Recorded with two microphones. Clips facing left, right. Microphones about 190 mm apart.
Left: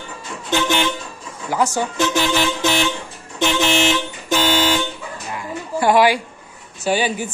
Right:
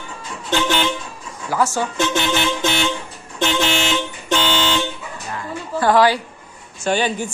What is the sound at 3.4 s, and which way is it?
Vehicle, 10° left (ahead or behind).